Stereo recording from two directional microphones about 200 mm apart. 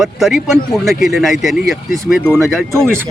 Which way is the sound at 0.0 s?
Centre (ahead or behind).